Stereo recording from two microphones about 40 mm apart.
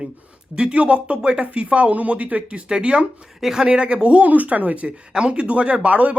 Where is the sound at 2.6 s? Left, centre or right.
Right.